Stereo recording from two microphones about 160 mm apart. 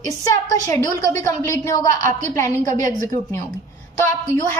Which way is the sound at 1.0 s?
20° left (ahead or behind).